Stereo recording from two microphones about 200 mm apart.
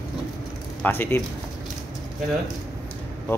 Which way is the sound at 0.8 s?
10° left (ahead or behind).